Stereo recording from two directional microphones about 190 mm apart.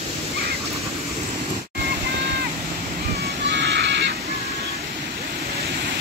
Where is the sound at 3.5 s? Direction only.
65° right (ahead or behind).